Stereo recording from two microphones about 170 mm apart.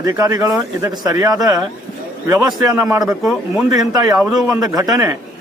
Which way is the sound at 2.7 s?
20° right (ahead or behind).